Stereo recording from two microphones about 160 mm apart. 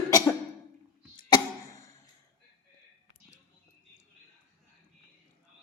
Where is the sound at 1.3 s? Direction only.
20° left (ahead or behind).